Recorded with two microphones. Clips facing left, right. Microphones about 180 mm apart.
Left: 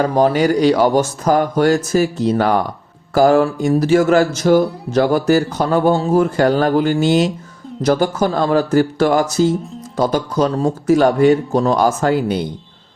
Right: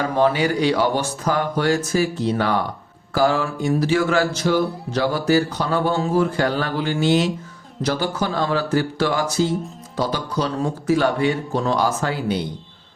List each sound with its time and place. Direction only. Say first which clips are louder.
0.0 s speech: left 5 dB; 40° left (ahead or behind)